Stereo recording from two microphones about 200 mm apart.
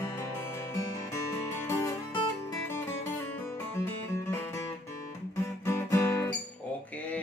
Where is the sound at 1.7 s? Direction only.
15° left (ahead or behind).